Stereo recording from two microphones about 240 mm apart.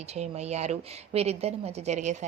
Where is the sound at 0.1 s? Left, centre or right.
Right.